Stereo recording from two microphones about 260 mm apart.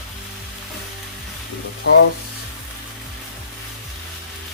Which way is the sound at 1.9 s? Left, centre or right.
Left.